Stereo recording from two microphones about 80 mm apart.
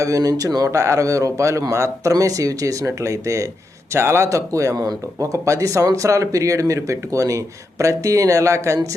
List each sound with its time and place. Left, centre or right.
0.0 s speech: right